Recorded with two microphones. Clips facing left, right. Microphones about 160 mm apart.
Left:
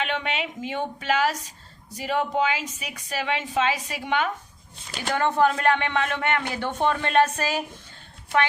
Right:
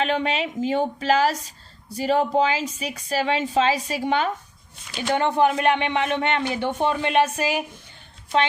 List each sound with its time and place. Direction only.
0.0 s a woman's voice: 35° right (ahead or behind)
5.1 s speech: 20° right (ahead or behind)